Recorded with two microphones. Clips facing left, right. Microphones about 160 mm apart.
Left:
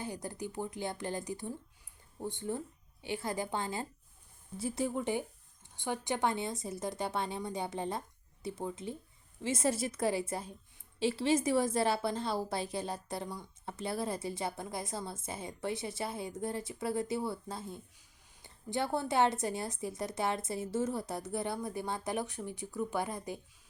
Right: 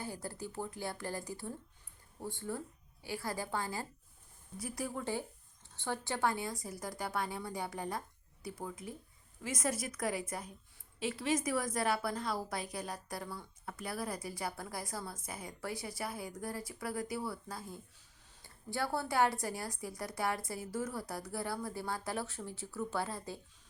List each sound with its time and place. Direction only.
0.0 s a woman's voice: 20° left (ahead or behind)